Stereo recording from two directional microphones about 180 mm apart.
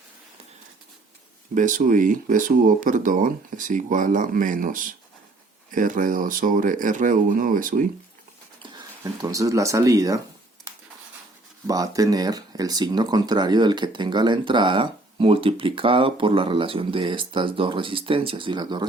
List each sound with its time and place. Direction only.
1.5 s speech: 45° right (ahead or behind)
9.2 s speech: 15° right (ahead or behind)
11.6 s speech: 20° right (ahead or behind)